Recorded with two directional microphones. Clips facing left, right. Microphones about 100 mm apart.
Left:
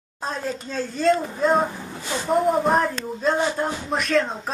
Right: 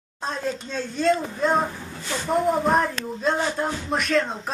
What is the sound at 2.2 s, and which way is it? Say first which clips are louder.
Speech: left 2 dB; centre (ahead or behind).